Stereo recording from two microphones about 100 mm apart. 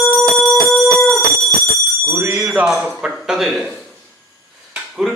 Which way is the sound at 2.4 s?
15° right (ahead or behind).